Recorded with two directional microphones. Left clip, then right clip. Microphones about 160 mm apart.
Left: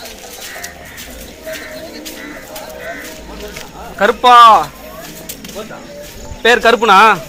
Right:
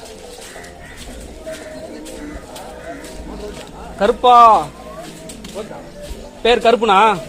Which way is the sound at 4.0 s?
15° left (ahead or behind).